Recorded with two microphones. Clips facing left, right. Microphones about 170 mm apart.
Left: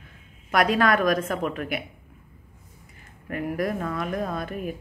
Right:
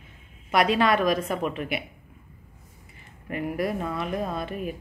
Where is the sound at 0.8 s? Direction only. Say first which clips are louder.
Left 1 dB; centre (ahead or behind).